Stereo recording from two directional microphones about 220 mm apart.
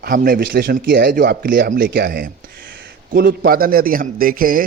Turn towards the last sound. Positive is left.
turn(degrees=-40)  # may be behind; listen again after turning